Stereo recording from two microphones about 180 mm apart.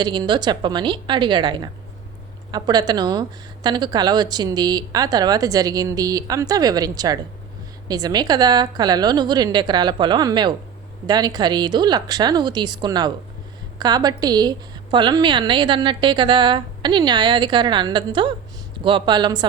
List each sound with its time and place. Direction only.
0.0 s speech: 25° right (ahead or behind)